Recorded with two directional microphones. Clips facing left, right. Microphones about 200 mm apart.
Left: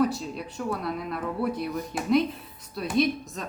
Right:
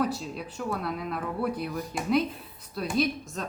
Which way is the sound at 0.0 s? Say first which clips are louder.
Left 4 dB; centre (ahead or behind).